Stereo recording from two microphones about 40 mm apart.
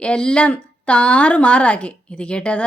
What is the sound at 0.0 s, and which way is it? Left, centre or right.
Speech, left.